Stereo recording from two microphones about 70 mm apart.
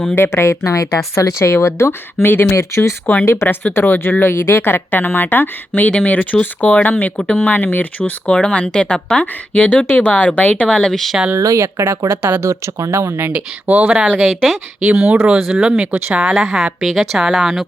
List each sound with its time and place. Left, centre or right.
0.2 s a woman's voice: left
0.6 s a woman's voice: left
2.6 s speech: left
3.2 s speech: left; by 9.2 s centre
9.2 s speech: left; by 11.2 s centre
11.3 s speech: right
12.4 s speech: right
13.2 s speech: right
14.3 s a woman's voice: centre
15.0 s speech: right
15.4 s speech: centre
15.9 s speech: right
16.3 s a woman's voice: centre